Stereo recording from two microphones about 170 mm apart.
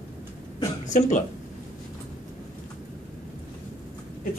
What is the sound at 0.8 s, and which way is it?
Speech, 45° left (ahead or behind).